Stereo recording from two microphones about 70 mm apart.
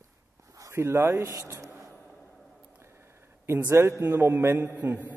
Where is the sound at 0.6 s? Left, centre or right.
Right.